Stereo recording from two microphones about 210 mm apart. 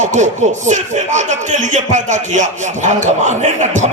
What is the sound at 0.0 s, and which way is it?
A man's voice, 35° right (ahead or behind).